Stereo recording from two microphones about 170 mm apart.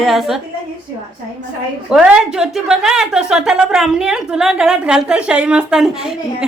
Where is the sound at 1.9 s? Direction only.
5° right (ahead or behind).